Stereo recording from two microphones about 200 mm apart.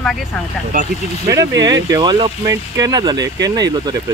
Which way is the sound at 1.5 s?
65° right (ahead or behind).